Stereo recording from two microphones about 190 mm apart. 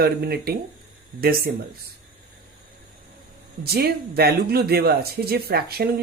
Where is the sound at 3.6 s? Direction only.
55° right (ahead or behind).